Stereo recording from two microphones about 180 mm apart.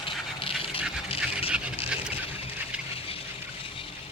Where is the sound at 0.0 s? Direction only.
30° left (ahead or behind).